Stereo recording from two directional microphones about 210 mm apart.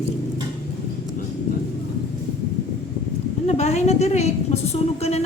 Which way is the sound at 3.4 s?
30° left (ahead or behind).